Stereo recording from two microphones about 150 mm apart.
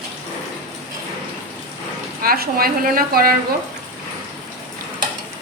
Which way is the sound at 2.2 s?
80° right.